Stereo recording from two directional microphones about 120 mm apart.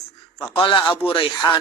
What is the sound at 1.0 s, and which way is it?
Speech, 45° left (ahead or behind).